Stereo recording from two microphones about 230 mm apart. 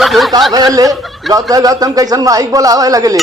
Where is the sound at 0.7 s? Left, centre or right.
Centre.